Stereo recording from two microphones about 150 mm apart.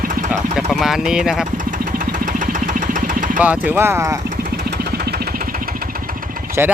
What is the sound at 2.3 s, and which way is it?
Engine, 60° right (ahead or behind).